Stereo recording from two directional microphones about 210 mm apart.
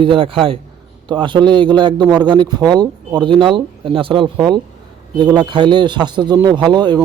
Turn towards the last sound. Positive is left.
turn(degrees=-20)  # may be behind; listen again after turning